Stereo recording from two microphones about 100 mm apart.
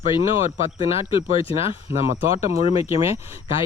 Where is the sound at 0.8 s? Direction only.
70° left (ahead or behind).